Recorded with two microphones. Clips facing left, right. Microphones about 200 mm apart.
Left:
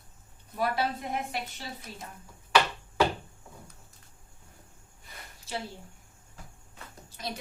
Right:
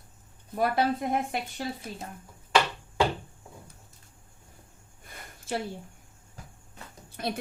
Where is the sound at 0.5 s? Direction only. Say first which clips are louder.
Right 4 dB; 50° right (ahead or behind).